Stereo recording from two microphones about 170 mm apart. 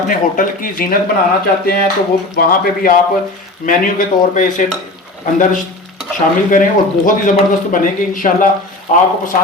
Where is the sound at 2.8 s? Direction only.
55° left (ahead or behind).